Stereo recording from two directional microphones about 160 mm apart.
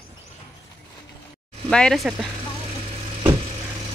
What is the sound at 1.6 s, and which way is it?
Speech, 5° left (ahead or behind).